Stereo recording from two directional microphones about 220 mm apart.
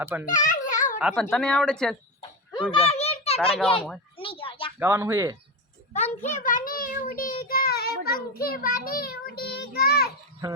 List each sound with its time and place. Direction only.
0.0 s speech: 10° right (ahead or behind)
0.3 s a sound: 35° left (ahead or behind)
0.9 s speech: 5° right (ahead or behind)
2.5 s a sound: 20° left (ahead or behind)
4.8 s speech: 10° right (ahead or behind)
5.9 s a child's voice: 30° left (ahead or behind)
7.1 s child singing: 45° left (ahead or behind)